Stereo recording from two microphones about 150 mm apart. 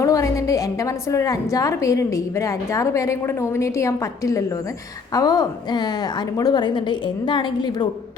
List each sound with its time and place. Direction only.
0.0 s a woman's voice: 20° left (ahead or behind)